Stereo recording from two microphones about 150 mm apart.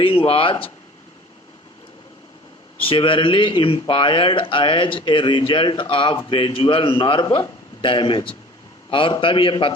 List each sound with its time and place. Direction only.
0.0 s speech: 40° left (ahead or behind)
2.7 s speech: 35° left (ahead or behind)